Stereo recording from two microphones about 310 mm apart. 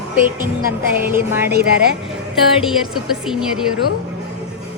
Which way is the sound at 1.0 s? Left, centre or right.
Centre.